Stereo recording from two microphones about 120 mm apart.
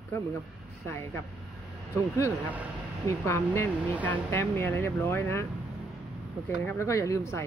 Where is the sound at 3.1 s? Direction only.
25° left (ahead or behind).